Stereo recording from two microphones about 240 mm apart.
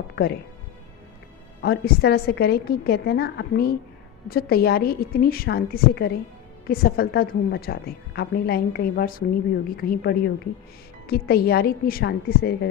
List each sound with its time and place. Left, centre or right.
1.6 s a woman's voice: left